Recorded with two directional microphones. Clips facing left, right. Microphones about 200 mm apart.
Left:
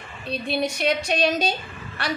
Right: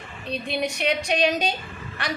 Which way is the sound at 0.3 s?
15° right (ahead or behind).